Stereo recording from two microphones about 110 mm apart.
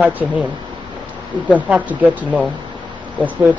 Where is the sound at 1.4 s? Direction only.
15° right (ahead or behind).